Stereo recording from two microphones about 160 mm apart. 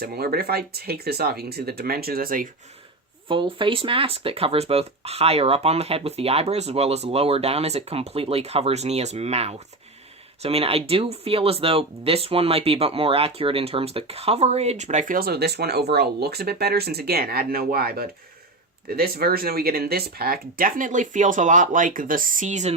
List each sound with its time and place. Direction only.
0.0 s speech: 75° right (ahead or behind)
3.2 s speech: 30° right (ahead or behind); by 22.7 s 45° right (ahead or behind)